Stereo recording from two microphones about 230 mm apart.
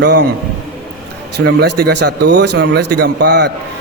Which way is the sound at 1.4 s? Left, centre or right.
Right.